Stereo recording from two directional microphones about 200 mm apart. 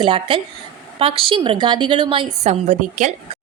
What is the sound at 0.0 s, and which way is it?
A woman's voice, 25° right (ahead or behind).